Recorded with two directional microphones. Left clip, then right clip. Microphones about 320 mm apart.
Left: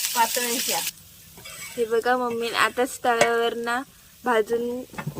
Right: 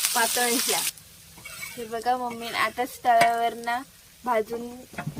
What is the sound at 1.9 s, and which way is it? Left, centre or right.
Speech, centre.